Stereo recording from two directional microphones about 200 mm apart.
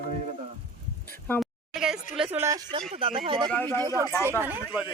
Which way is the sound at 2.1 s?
5° right (ahead or behind).